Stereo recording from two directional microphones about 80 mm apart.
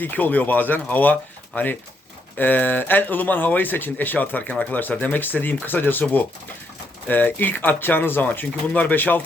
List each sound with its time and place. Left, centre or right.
0.0 s speech: left